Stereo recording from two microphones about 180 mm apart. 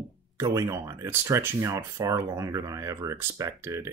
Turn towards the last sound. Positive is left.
turn(degrees=-15)  # may be behind; listen again after turning